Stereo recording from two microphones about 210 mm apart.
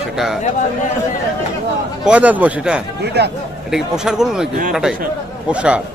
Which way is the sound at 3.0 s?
50° right (ahead or behind).